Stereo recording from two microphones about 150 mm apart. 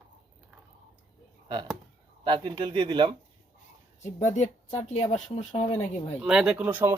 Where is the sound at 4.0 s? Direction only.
50° left (ahead or behind).